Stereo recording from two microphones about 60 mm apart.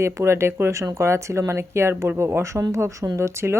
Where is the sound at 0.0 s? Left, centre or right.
Right.